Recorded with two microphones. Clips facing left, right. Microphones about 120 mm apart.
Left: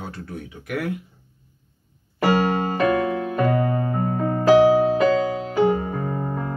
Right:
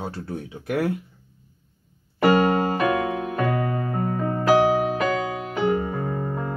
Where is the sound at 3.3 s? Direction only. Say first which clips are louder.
Left 4 dB; 30° left (ahead or behind).